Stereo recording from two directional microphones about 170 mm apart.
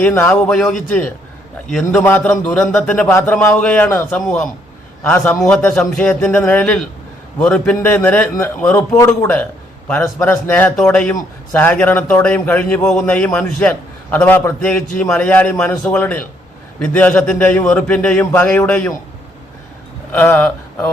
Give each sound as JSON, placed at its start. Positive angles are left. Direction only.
{"t": 0.0, "sound": "a man's voice", "side_deg": 10}
{"t": 20.1, "sound": "a man's voice", "side_deg": 10}